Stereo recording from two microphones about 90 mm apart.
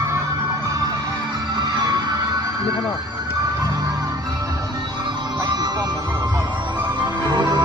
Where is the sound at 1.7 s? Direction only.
50° right (ahead or behind).